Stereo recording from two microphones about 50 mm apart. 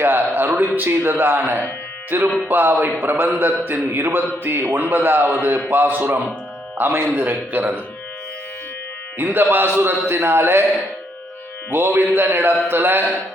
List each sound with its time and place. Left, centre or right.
0.0 s a sound: right
0.8 s a man's voice: right
9.1 s a man's voice: right
10.1 s a man's voice: right
11.7 s a man's voice: right